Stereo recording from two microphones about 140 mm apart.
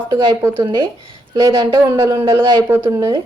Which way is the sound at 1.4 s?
25° right (ahead or behind).